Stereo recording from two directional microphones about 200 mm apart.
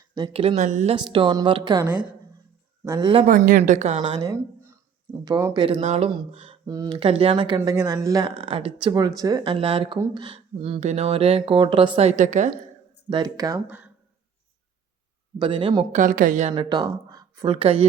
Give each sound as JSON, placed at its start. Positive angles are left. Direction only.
{"t": 0.1, "sound": "a woman's voice", "side_deg": -25}
{"t": 0.9, "sound": "speech", "side_deg": -25}
{"t": 3.2, "sound": "a woman's voice", "side_deg": -40}
{"t": 4.2, "sound": "a sound", "side_deg": -15}
{"t": 5.2, "sound": "speech", "side_deg": -15}
{"t": 5.6, "sound": "speech", "side_deg": -30}
{"t": 8.4, "sound": "speech", "side_deg": -30}
{"t": 13.1, "sound": "speech", "side_deg": -20}
{"t": 15.4, "sound": "speech", "side_deg": -25}
{"t": 16.0, "sound": "a woman's voice", "side_deg": -40}
{"t": 16.6, "sound": "speech", "side_deg": -20}